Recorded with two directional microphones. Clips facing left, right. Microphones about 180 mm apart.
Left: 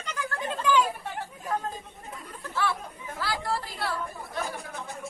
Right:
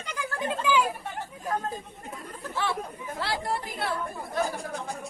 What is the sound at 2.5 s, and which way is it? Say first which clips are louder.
Chatter: even; 15° right (ahead or behind).